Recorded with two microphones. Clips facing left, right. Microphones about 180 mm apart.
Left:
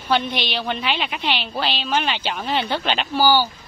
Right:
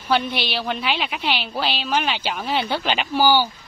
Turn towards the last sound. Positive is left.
turn(degrees=-15)  # may be behind; listen again after turning